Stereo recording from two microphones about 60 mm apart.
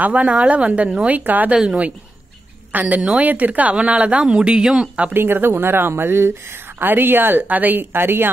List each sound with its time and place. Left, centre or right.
0.0 s a woman's voice: right
1.5 s speech: centre
2.7 s a woman's voice: right
5.1 s speech: right